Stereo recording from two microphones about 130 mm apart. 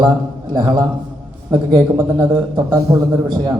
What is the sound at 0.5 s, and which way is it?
Speech, 35° right (ahead or behind).